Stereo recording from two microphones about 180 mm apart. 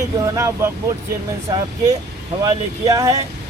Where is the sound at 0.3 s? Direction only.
15° right (ahead or behind).